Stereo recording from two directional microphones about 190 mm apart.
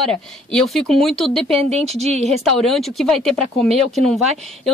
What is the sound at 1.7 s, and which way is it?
Speech, 35° right (ahead or behind).